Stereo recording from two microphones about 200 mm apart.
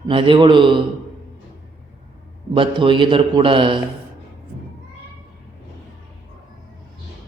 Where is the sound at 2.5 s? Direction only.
25° right (ahead or behind).